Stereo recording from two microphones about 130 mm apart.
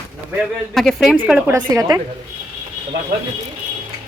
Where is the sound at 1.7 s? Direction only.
25° right (ahead or behind).